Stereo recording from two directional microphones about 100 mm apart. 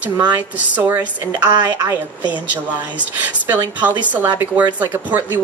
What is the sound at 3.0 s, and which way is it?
A woman's voice, 20° right (ahead or behind).